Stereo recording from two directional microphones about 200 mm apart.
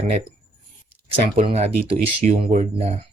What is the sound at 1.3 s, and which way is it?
Speech, 30° right (ahead or behind).